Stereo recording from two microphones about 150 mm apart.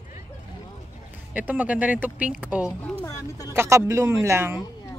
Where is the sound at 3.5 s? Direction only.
20° right (ahead or behind).